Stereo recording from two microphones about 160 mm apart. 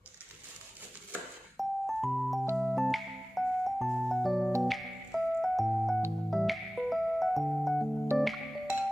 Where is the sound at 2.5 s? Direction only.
Centre (ahead or behind).